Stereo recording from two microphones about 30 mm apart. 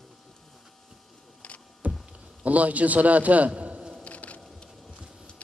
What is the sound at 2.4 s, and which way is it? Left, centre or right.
A man's voice, right.